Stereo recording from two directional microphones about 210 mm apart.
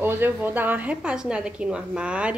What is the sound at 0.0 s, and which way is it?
A woman's voice, 10° right (ahead or behind).